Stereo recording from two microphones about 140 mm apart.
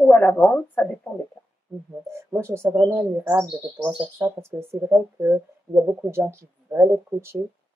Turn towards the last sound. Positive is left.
turn(degrees=-15)  # may be behind; listen again after turning